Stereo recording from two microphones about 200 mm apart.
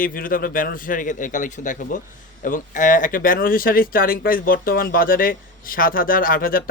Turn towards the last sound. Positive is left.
turn(degrees=45)  # may be behind; listen again after turning